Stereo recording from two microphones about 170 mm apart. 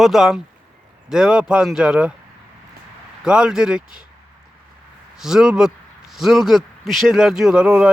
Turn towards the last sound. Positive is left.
turn(degrees=-5)  # may be behind; listen again after turning